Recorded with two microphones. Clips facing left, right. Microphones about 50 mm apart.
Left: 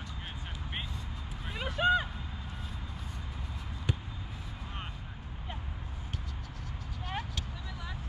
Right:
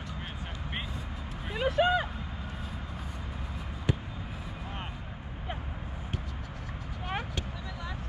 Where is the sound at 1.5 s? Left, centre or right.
Centre.